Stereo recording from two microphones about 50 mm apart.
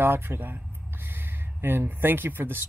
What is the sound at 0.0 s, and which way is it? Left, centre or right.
Speech, right.